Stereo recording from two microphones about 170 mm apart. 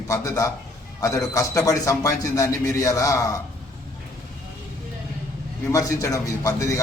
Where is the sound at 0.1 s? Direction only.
15° left (ahead or behind).